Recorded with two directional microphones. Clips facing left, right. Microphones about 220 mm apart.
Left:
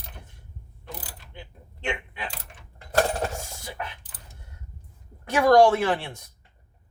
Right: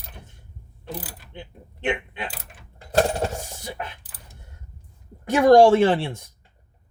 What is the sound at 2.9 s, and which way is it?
Coin, 25° right (ahead or behind).